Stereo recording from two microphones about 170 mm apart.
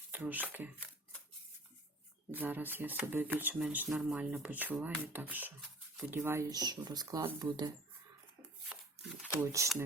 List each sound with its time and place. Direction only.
0.1 s speech: 10° right (ahead or behind)
2.3 s speech: 10° right (ahead or behind)
9.4 s speech: 20° right (ahead or behind)